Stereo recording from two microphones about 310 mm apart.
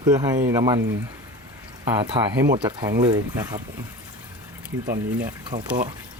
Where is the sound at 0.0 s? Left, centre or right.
Centre.